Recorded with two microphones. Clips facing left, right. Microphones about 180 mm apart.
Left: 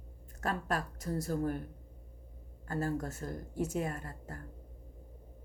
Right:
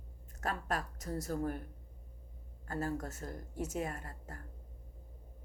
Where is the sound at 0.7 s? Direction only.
30° left (ahead or behind).